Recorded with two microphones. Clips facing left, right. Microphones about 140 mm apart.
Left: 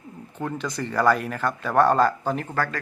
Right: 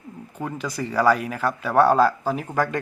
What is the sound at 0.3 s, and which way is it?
Speech, 5° right (ahead or behind).